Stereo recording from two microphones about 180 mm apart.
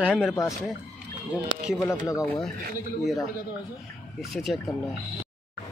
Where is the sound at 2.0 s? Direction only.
15° left (ahead or behind).